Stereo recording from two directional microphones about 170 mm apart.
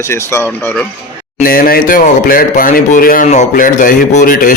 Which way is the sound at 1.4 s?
55° left (ahead or behind).